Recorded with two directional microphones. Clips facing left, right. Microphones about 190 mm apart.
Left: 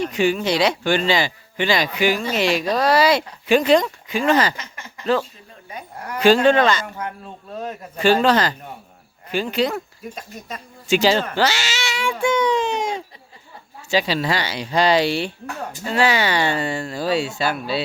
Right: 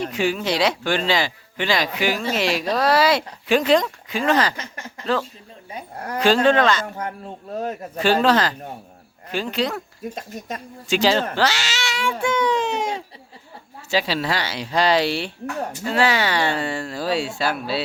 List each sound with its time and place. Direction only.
0.0 s speech: centre (ahead or behind)
5.7 s speech: 35° right (ahead or behind)
6.1 s speech: centre (ahead or behind)
7.9 s speech: centre (ahead or behind)
10.8 s speech: centre (ahead or behind)